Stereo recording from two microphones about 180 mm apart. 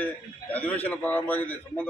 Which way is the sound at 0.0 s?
10° left (ahead or behind).